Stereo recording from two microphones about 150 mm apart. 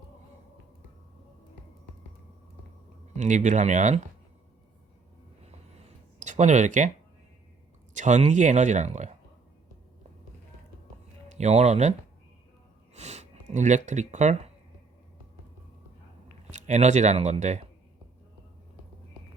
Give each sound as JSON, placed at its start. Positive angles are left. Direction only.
{"t": 3.2, "sound": "speech", "side_deg": -55}
{"t": 6.1, "sound": "speech", "side_deg": -55}
{"t": 7.9, "sound": "speech", "side_deg": -55}
{"t": 11.3, "sound": "speech", "side_deg": -50}
{"t": 16.5, "sound": "speech", "side_deg": -50}